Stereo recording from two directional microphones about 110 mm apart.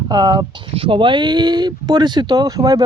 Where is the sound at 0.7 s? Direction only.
55° right (ahead or behind).